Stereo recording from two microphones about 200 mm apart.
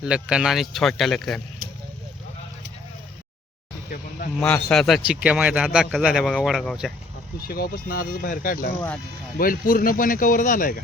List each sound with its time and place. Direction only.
0.0 s a man's voice: 5° right (ahead or behind)
3.8 s speech: 45° left (ahead or behind)
4.4 s a man's voice: 5° left (ahead or behind)
7.3 s speech: 50° left (ahead or behind)